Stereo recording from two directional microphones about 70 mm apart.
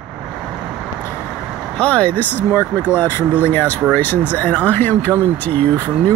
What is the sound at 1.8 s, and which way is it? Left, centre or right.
Speech, centre.